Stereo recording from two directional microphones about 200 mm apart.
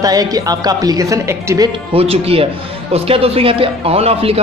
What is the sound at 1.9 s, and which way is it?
Speech, 30° right (ahead or behind).